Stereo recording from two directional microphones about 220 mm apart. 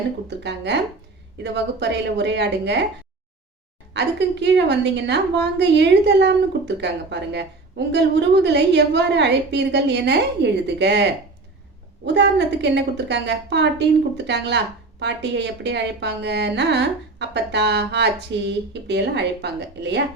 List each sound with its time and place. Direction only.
0.3 s a woman's voice: 50° right (ahead or behind)
3.9 s a woman's voice: 50° right (ahead or behind)